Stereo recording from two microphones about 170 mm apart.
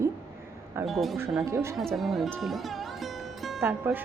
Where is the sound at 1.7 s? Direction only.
Centre (ahead or behind).